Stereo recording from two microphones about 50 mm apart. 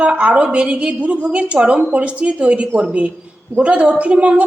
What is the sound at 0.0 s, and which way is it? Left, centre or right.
A woman's voice, right.